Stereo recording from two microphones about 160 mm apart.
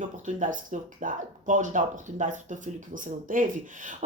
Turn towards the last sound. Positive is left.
turn(degrees=-55)  # may be behind; listen again after turning